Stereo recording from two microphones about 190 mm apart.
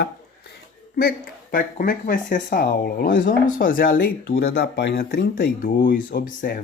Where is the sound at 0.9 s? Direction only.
50° left (ahead or behind).